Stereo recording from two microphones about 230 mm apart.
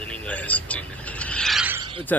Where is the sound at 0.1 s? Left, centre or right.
Centre.